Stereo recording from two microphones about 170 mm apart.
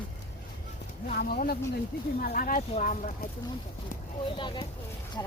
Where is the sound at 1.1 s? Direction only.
60° left (ahead or behind).